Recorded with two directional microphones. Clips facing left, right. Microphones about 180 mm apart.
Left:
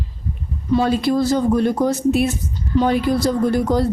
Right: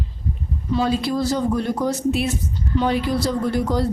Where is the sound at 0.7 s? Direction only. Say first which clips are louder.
Left 4 dB; 55° left (ahead or behind).